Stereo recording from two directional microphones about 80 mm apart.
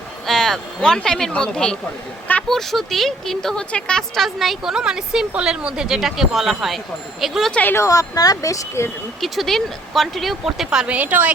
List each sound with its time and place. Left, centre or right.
0.3 s speech: centre
7.5 s speech: left
7.8 s speech: left
9.2 s speech: centre